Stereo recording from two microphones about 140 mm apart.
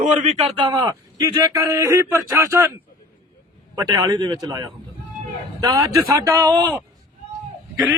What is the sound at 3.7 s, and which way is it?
Speech, 25° right (ahead or behind).